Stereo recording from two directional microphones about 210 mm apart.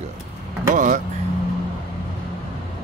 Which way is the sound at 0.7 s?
40° right (ahead or behind).